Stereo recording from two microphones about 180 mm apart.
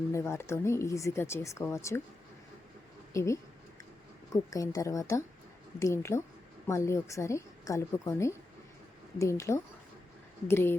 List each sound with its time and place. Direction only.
0.1 s a woman's voice: 15° left (ahead or behind)
3.1 s a woman's voice: 15° left (ahead or behind)